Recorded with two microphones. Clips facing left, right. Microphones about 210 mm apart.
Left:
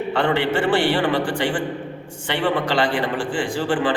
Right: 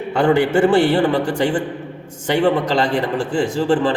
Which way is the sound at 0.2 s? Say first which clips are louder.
Right 7 dB; 45° right (ahead or behind).